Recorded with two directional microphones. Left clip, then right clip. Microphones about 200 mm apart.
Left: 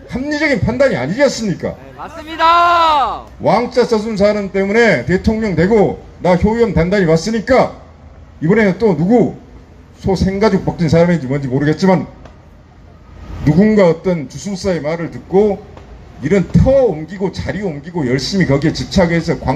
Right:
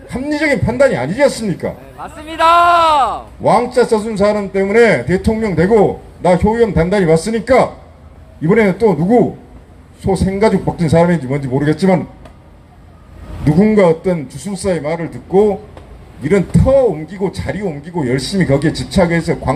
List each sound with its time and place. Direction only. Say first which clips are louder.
0.1 s a man's voice: even; 35° right (ahead or behind)
2.0 s speech: right 1 dB; 5° right (ahead or behind)
3.4 s a man's voice: right 1 dB; 35° right (ahead or behind)
13.4 s a man's voice: even; 35° right (ahead or behind)